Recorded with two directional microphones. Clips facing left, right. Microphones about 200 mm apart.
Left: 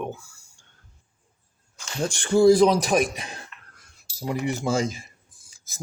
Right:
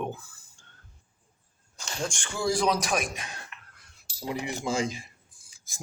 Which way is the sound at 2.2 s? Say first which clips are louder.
Left 14 dB; 35° left (ahead or behind).